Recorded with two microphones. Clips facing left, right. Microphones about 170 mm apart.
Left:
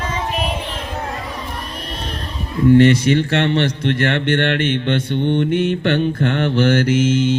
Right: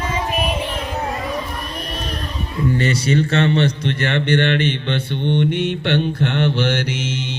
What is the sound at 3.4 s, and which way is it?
Speech, 50° left (ahead or behind).